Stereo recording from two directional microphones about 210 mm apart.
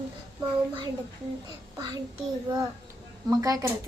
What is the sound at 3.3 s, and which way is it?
Speech, 15° right (ahead or behind).